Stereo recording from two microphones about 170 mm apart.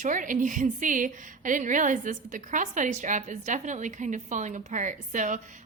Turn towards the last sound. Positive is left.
turn(degrees=-50)  # may be behind; listen again after turning